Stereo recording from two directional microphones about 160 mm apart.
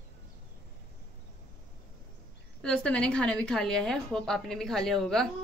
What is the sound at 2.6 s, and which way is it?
Speech, 5° left (ahead or behind).